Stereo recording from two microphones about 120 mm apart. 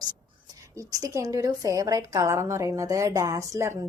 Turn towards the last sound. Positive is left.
turn(degrees=-25)  # may be behind; listen again after turning